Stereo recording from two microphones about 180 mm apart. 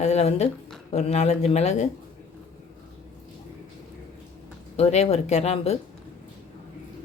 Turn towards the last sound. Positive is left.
turn(degrees=35)  # may be behind; listen again after turning